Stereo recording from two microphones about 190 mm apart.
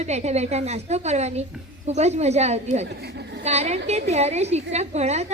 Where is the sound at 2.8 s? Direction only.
60° right (ahead or behind).